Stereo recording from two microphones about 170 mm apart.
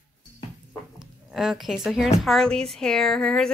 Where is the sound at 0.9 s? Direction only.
5° right (ahead or behind).